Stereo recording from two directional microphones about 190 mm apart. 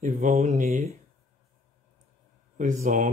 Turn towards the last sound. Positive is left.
turn(degrees=-40)  # may be behind; listen again after turning